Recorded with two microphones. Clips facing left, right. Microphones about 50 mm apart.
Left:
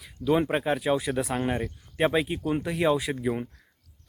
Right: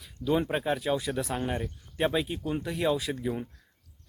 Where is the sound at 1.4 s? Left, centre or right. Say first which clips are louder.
Left 4 dB; left.